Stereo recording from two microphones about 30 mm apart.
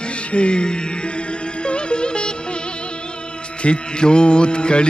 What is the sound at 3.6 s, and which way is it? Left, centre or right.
A man's voice, left.